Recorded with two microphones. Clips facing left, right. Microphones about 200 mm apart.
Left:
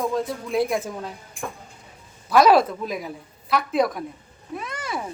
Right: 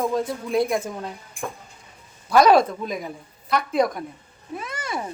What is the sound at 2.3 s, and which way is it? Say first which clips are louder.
A woman's voice: even; centre (ahead or behind).